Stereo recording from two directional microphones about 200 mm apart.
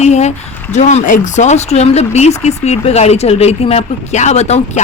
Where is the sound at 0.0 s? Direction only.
35° left (ahead or behind).